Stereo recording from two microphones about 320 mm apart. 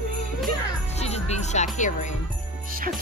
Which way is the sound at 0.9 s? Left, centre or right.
Centre.